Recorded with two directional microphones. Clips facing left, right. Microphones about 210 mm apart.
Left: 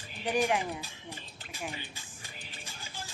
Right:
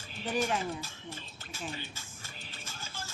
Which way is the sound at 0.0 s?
15° left (ahead or behind).